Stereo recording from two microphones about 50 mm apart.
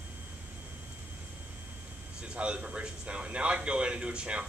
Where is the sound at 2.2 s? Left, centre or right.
Right.